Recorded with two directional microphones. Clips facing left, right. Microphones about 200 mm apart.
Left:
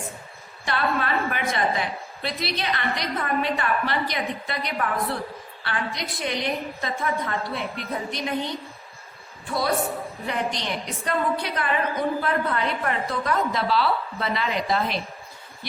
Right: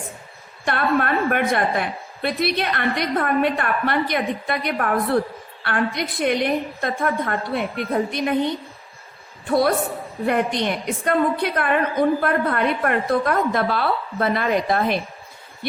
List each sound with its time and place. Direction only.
0.6 s a woman's voice: 55° right (ahead or behind)
10.2 s a woman's voice: 55° right (ahead or behind)